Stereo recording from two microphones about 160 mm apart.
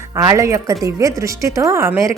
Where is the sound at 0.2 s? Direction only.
20° right (ahead or behind).